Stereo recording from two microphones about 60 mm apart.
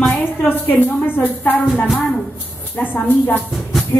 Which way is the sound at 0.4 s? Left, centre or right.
Left.